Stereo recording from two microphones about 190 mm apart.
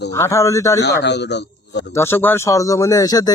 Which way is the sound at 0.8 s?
65° left (ahead or behind).